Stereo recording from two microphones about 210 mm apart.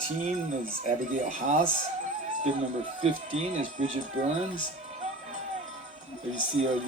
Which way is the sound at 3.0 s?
30° right (ahead or behind).